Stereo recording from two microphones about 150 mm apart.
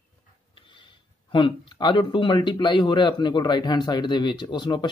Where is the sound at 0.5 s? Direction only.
35° left (ahead or behind).